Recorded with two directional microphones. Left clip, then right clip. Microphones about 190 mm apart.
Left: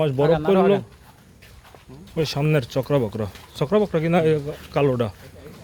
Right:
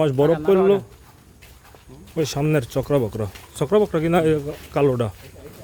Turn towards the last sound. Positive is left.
turn(degrees=-10)  # may be behind; listen again after turning